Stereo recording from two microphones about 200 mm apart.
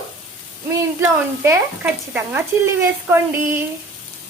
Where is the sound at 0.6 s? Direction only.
15° right (ahead or behind).